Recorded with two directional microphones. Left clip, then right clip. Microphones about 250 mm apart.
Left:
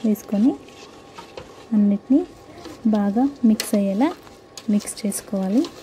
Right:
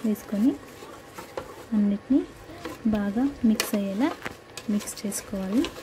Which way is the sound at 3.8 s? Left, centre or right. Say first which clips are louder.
Left 6 dB; centre.